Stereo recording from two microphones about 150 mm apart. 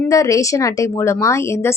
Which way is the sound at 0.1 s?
20° left (ahead or behind).